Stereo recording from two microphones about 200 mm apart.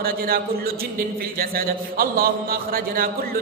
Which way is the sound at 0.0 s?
50° right (ahead or behind).